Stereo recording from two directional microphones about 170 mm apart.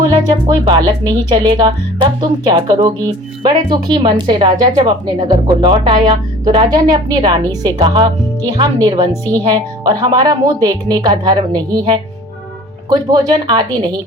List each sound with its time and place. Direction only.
0.3 s speech: 25° right (ahead or behind)